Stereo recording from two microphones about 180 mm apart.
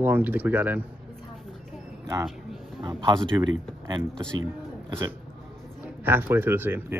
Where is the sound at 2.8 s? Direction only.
25° right (ahead or behind).